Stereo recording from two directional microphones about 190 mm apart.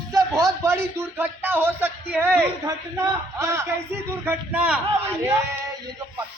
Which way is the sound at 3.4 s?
15° right (ahead or behind).